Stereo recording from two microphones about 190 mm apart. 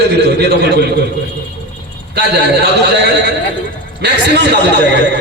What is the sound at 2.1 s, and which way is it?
A man's voice, 55° right (ahead or behind).